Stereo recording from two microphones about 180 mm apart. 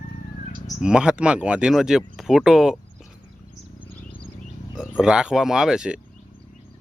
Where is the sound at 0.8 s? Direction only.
5° right (ahead or behind).